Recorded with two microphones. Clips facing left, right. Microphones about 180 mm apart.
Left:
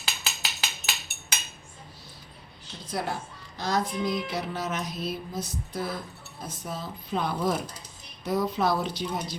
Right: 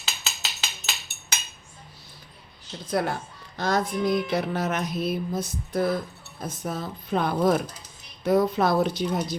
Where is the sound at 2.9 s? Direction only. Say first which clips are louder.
Right 5 dB; 55° right (ahead or behind).